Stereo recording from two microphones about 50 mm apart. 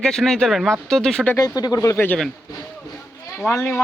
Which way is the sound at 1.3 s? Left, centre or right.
Left.